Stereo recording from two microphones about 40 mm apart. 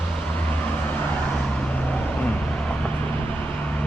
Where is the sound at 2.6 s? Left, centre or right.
Left.